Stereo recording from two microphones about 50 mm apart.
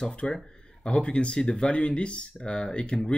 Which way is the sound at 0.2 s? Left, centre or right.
Centre.